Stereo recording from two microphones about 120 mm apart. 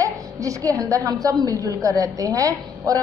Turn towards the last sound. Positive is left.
turn(degrees=-30)  # may be behind; listen again after turning